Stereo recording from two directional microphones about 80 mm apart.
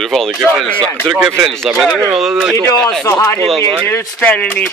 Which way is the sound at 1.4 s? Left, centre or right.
Centre.